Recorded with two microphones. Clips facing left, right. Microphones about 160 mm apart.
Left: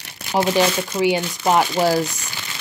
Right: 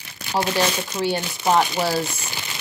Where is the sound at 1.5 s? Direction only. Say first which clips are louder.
Left 3 dB; 10° left (ahead or behind).